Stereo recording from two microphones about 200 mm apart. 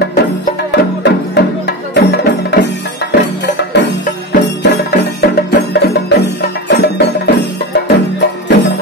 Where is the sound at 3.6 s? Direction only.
60° left (ahead or behind).